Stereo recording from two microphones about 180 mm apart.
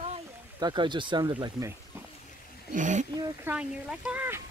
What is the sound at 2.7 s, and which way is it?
Speech, 45° right (ahead or behind).